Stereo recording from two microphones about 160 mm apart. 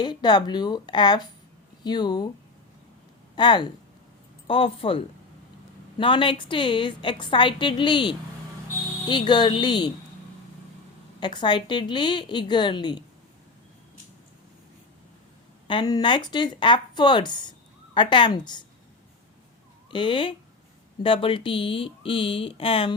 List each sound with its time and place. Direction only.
0.0 s speech: 25° left (ahead or behind)
3.3 s a woman's voice: 30° left (ahead or behind)
11.2 s speech: 30° left (ahead or behind)
15.6 s speech: 30° left (ahead or behind)
19.9 s a woman's voice: 30° left (ahead or behind)